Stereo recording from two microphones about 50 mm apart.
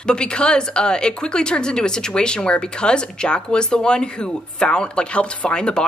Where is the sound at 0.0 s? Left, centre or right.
Centre.